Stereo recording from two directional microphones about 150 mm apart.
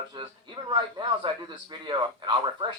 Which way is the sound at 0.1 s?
30° right (ahead or behind).